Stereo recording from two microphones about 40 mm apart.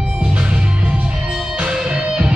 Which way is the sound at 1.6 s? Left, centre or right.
Right.